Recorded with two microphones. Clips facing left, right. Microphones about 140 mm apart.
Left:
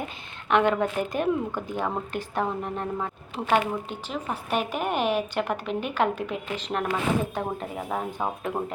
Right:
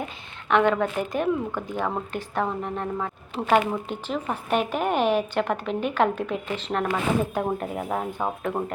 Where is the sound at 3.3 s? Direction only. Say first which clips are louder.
Right 3 dB; centre (ahead or behind).